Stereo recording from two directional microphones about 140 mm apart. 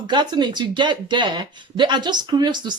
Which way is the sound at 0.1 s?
30° right (ahead or behind).